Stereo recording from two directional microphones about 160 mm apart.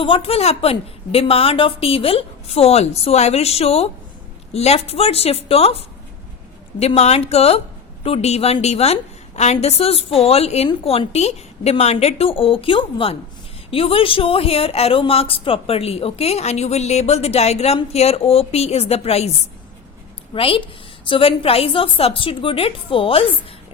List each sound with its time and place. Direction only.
0.0 s speech: 35° left (ahead or behind)
20.3 s speech: 35° left (ahead or behind)